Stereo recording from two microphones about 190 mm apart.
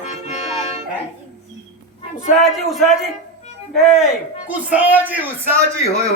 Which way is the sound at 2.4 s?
Centre (ahead or behind).